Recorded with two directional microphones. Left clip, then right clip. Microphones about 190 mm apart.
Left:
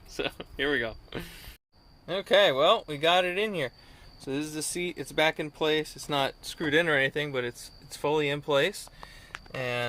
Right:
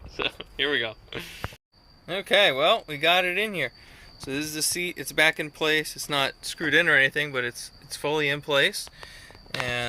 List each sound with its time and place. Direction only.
0.2 s speech: 30° left (ahead or behind)
2.0 s speech: 10° left (ahead or behind)